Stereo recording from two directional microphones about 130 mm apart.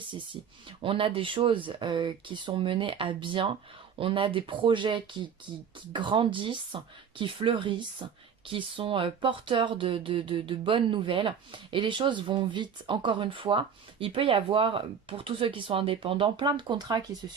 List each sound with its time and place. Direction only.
0.8 s speech: 45° right (ahead or behind)